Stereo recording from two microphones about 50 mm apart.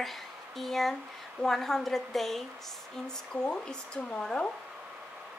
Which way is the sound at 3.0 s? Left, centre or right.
Centre.